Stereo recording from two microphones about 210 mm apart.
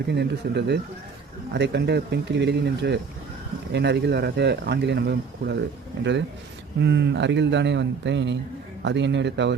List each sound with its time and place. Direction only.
0.1 s speech: 55° right (ahead or behind)